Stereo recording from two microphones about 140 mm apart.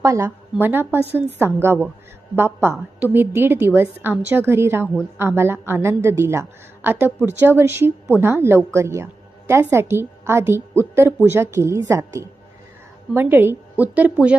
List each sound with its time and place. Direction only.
0.0 s a woman's voice: 20° right (ahead or behind)